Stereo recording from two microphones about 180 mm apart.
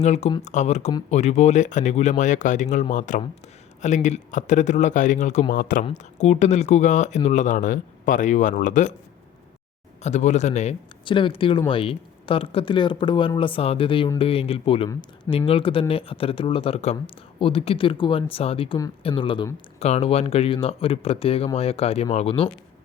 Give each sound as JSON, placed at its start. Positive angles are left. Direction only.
{"t": 0.0, "sound": "speech", "side_deg": 40}
{"t": 5.8, "sound": "speech", "side_deg": 40}
{"t": 10.0, "sound": "speech", "side_deg": 40}
{"t": 11.0, "sound": "speech", "side_deg": 30}